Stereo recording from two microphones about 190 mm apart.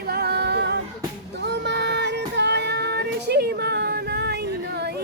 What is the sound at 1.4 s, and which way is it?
Child singing, 65° right (ahead or behind).